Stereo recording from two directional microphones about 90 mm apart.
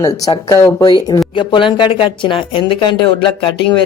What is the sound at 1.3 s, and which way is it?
Speech, 70° left (ahead or behind).